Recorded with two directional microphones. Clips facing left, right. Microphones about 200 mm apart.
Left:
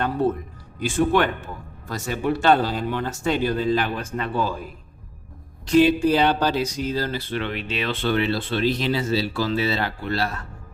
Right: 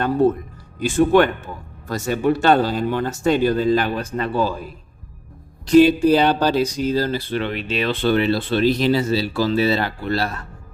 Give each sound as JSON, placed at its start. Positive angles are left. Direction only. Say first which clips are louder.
{"t": 0.8, "sound": "speech", "louder": "right 5 dB", "side_deg": -45}
{"t": 5.6, "sound": "speech", "louder": "right 4 dB", "side_deg": -40}